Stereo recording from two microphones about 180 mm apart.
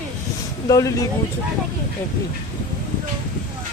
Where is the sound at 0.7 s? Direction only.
20° left (ahead or behind).